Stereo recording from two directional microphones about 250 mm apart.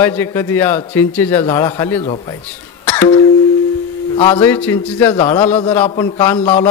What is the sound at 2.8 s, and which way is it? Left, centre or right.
Cough, centre.